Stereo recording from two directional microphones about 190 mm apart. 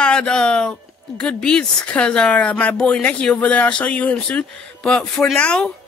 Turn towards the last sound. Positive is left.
turn(degrees=5)  # may be behind; listen again after turning